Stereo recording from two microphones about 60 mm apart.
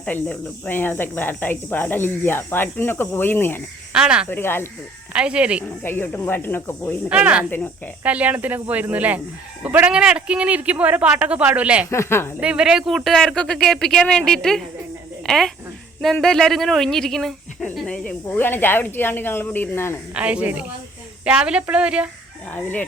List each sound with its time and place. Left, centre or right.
0.1 s speech: left
3.9 s a woman's voice: centre
4.3 s speech: left
5.1 s speech: centre
5.6 s speech: left
7.1 s speech: right
9.9 s speech: centre
11.9 s a woman's voice: left
12.4 s a woman's voice: centre
13.1 s speech: centre
17.8 s speech: centre
18.3 s speech: left
20.1 s a woman's voice: right
22.4 s speech: left